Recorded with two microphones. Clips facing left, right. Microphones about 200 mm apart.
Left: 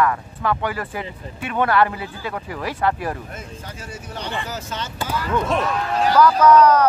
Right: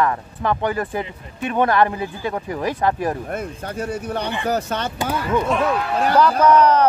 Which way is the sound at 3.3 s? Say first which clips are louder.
Right 9 dB; 60° right (ahead or behind).